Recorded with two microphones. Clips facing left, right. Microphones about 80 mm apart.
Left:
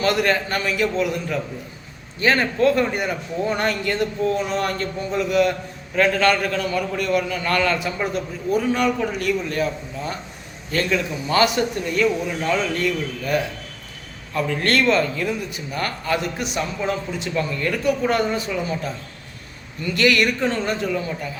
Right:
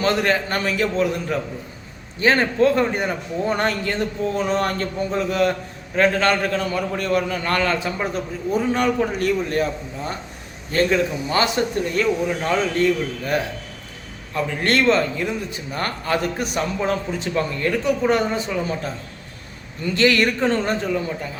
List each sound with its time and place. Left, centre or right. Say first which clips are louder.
0.0 s a man's voice: even; right
10.7 s a man's voice: right 3 dB; right
17.6 s a man's voice: even; right
18.3 s a man's voice: right 1 dB; right